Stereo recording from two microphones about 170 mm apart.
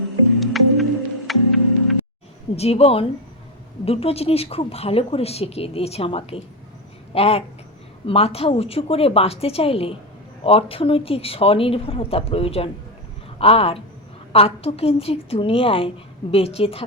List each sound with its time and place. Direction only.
0.3 s music: centre (ahead or behind)
2.6 s speech: 35° left (ahead or behind)